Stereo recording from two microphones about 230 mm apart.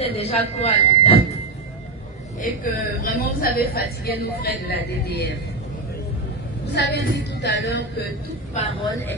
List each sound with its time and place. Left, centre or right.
0.0 s speech: left
2.6 s a woman's voice: left
6.6 s a woman's voice: left
8.6 s speech: left